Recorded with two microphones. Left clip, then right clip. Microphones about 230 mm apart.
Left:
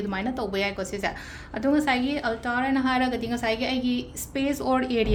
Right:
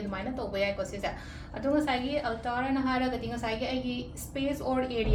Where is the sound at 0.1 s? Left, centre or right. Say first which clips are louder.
Left 3 dB; left.